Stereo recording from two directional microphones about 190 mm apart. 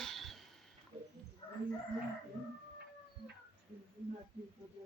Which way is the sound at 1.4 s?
25° left (ahead or behind).